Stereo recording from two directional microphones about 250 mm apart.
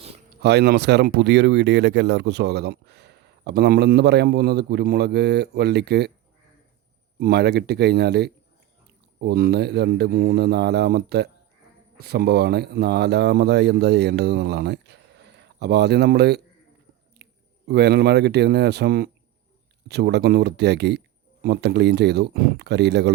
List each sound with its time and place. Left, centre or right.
0.3 s speech: right
7.2 s speech: right
17.2 s a sound: right
17.7 s speech: right